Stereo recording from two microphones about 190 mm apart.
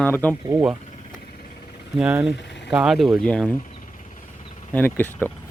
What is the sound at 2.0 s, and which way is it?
Speech, 5° right (ahead or behind).